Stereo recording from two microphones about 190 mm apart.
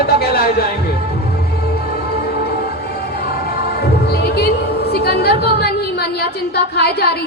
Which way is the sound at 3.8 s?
55° left (ahead or behind).